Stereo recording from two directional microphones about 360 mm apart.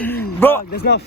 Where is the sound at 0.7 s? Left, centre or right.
Left.